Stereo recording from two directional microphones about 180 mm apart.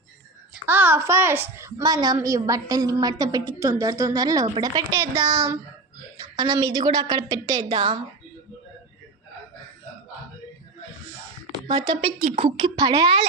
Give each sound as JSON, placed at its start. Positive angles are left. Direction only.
{"t": 0.5, "sound": "a woman's voice", "side_deg": -10}
{"t": 11.7, "sound": "a woman's voice", "side_deg": -25}